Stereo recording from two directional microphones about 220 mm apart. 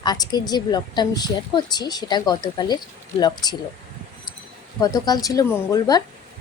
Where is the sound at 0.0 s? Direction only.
20° left (ahead or behind).